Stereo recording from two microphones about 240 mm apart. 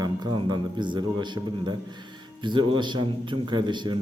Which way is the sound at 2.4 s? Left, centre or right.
Centre.